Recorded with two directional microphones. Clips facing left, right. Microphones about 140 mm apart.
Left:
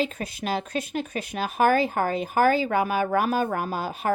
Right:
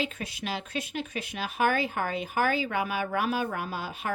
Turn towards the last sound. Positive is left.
turn(degrees=40)  # may be behind; listen again after turning